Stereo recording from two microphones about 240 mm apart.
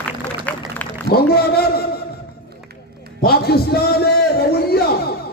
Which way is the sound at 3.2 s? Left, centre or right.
Left.